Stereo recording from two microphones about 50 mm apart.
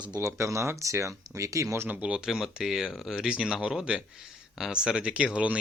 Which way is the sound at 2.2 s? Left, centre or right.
Centre.